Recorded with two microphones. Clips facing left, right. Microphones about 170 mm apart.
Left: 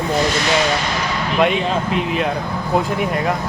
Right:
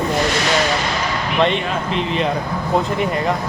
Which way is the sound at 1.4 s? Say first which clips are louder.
Left 1 dB; 5° left (ahead or behind).